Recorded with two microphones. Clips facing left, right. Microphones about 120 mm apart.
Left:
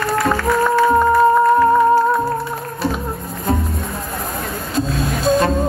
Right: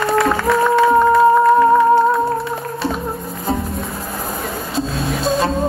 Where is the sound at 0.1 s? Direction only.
Centre (ahead or behind).